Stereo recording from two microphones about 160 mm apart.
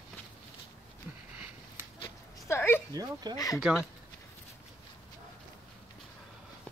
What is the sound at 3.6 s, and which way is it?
Speech, 5° right (ahead or behind).